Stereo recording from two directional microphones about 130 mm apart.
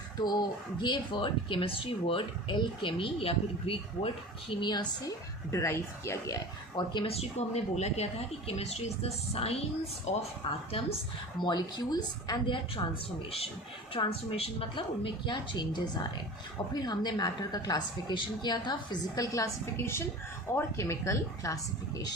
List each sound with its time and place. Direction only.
0.2 s speech: 30° left (ahead or behind)
5.5 s a woman's voice: 20° left (ahead or behind); by 10.2 s 60° left (ahead or behind)
11.3 s speech: 35° left (ahead or behind)
13.9 s a woman's voice: 45° left (ahead or behind); by 22.0 s 25° left (ahead or behind)